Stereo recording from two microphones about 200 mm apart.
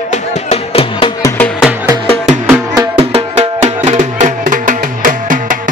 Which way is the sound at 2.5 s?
20° right (ahead or behind).